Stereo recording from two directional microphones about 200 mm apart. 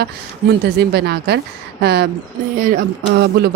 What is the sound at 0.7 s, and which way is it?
A woman's voice, 55° right (ahead or behind).